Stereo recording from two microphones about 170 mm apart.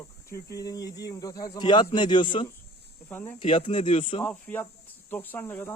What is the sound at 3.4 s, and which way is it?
Speech, 30° left (ahead or behind).